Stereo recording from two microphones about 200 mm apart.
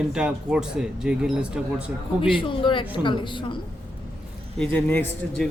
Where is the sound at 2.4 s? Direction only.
25° left (ahead or behind).